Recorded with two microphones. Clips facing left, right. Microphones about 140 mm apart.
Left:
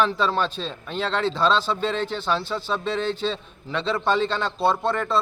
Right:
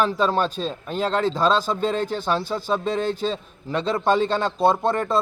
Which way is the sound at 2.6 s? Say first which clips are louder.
Right 2 dB; 45° right (ahead or behind).